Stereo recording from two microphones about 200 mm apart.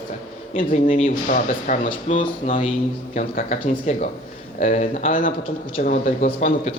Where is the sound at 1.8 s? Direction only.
30° left (ahead or behind).